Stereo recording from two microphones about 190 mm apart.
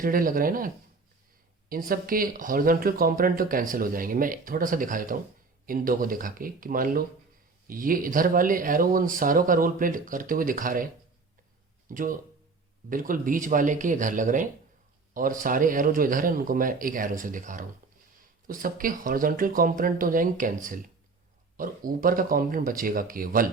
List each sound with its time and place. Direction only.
0.0 s speech: 45° right (ahead or behind)
1.7 s speech: 50° right (ahead or behind)
11.9 s speech: 45° right (ahead or behind)